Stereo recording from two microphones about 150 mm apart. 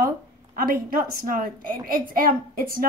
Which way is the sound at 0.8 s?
70° right (ahead or behind).